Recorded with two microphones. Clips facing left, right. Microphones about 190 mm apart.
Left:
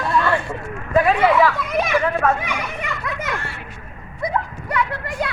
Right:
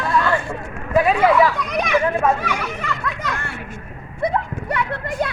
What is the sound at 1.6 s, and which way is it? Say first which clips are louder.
Children playing: left 1 dB; 5° left (ahead or behind).